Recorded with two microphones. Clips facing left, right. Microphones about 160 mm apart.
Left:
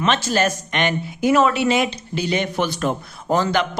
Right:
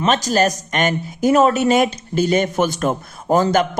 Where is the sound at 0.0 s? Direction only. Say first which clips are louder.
Right 3 dB; 40° right (ahead or behind).